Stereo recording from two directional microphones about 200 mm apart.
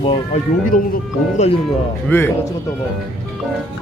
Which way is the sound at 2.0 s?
10° left (ahead or behind).